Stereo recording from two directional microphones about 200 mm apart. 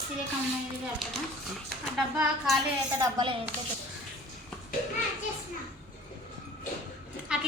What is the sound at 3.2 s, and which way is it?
Speech, 25° right (ahead or behind).